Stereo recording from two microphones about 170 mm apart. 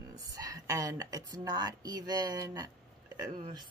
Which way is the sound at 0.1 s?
20° right (ahead or behind).